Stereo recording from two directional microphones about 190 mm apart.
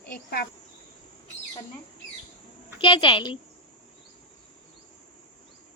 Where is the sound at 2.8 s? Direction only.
25° left (ahead or behind).